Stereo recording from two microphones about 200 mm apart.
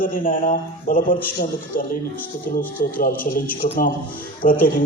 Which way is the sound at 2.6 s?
45° left (ahead or behind).